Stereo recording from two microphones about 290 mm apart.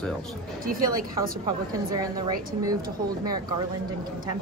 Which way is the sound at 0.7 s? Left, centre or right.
Right.